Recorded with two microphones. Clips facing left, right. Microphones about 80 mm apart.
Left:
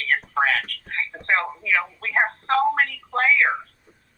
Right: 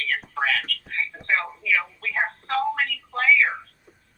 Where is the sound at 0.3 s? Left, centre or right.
Left.